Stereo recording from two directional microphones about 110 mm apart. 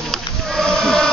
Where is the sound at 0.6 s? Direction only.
5° left (ahead or behind).